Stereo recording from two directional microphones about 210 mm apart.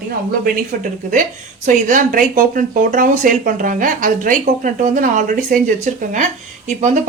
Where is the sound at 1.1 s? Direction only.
40° right (ahead or behind).